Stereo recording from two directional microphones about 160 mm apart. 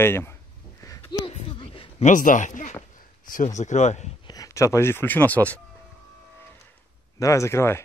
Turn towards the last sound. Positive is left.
turn(degrees=15)  # may be behind; listen again after turning